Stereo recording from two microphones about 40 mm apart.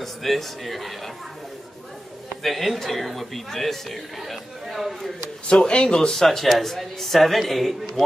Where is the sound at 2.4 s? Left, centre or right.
Centre.